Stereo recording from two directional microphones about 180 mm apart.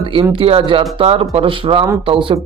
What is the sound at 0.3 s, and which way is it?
Speech, 30° right (ahead or behind).